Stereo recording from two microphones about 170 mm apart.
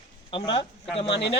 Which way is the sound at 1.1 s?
90° left.